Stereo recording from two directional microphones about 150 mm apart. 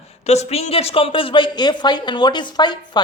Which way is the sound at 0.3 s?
45° left (ahead or behind).